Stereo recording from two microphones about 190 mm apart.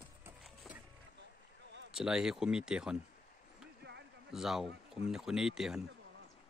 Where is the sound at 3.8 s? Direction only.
65° right (ahead or behind).